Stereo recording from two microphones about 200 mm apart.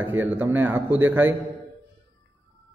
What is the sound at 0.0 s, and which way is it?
A man's voice, 10° right (ahead or behind).